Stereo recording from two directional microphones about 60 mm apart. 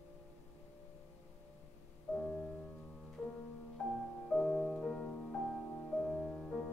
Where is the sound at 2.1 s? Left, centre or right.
Centre.